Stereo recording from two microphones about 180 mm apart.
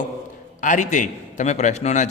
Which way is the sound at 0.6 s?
45° left (ahead or behind).